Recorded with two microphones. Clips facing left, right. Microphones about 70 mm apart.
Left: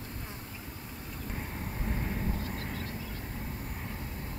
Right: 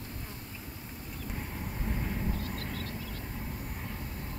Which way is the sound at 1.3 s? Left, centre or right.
Centre.